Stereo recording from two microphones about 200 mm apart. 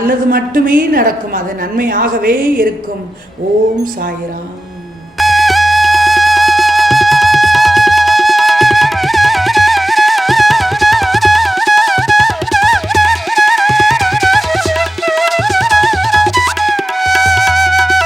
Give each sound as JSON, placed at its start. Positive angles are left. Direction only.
{"t": 0.1, "sound": "a woman's voice", "side_deg": -45}
{"t": 5.2, "sound": "music", "side_deg": 0}